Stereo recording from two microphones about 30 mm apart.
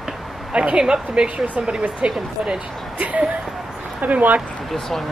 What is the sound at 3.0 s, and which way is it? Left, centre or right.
Speech, right.